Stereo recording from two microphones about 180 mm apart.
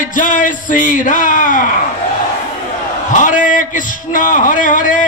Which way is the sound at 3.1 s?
45° left (ahead or behind).